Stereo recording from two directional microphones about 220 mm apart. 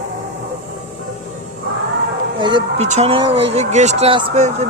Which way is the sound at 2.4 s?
20° right (ahead or behind).